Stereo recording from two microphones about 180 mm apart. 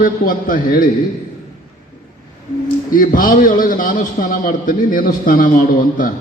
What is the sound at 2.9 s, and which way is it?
A man's voice, 50° left (ahead or behind).